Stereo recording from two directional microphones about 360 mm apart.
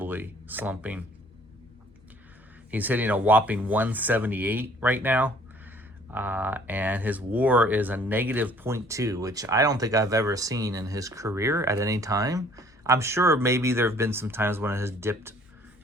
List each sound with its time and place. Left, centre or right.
0.0 s speech: centre
2.6 s speech: centre